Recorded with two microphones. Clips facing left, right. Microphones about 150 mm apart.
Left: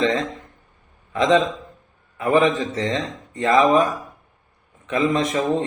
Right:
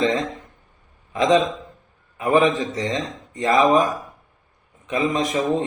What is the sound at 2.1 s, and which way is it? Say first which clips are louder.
A man's voice: even; 10° right (ahead or behind).